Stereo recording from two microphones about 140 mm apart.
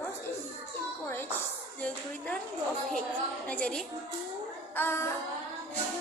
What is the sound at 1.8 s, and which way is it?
Speech, 10° left (ahead or behind).